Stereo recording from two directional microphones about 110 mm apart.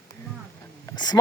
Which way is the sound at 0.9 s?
40° left (ahead or behind).